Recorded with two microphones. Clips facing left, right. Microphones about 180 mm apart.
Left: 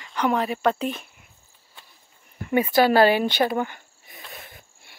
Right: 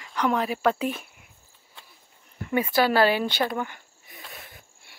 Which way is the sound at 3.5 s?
30° left (ahead or behind).